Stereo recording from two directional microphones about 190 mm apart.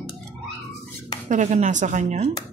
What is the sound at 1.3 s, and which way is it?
Speech, 40° right (ahead or behind).